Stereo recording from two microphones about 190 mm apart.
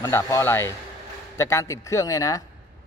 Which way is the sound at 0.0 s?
15° left (ahead or behind).